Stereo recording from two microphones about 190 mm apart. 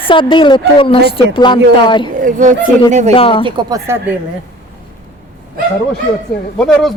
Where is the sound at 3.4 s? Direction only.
20° right (ahead or behind).